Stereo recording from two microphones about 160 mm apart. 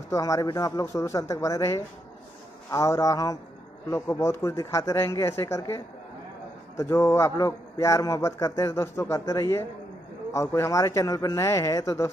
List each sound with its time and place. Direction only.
0.1 s a man's voice: 20° left (ahead or behind)
6.8 s a man's voice: 15° left (ahead or behind)